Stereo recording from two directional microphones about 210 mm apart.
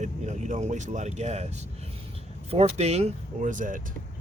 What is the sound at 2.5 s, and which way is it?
Speech, 30° right (ahead or behind).